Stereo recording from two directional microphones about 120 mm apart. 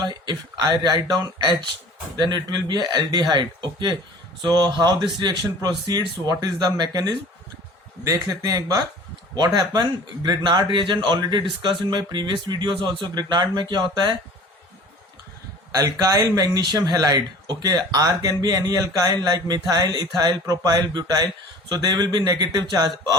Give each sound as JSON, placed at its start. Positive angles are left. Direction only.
{"t": 0.0, "sound": "speech", "side_deg": -35}
{"t": 15.7, "sound": "speech", "side_deg": -30}